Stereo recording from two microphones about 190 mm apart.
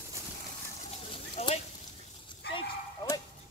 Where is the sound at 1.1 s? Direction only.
30° left (ahead or behind).